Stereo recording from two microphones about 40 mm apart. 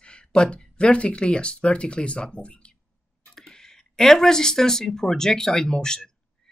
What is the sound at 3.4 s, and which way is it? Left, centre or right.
Speech, centre.